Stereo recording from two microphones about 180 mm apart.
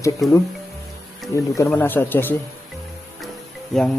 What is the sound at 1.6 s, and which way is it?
Speech, 15° left (ahead or behind).